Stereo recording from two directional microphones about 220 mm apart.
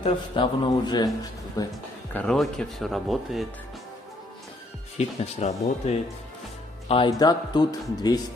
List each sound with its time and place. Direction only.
0.0 s a man's voice: 20° left (ahead or behind)
2.1 s speech: centre (ahead or behind)
4.9 s a man's voice: 30° left (ahead or behind)